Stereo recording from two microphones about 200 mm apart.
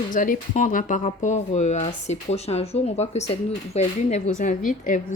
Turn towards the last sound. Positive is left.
turn(degrees=40)  # may be behind; listen again after turning